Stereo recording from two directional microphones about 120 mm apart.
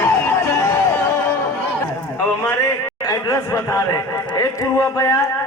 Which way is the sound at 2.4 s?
25° left (ahead or behind).